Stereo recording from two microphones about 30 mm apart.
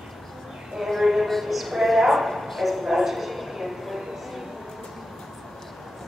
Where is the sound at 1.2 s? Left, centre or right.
Centre.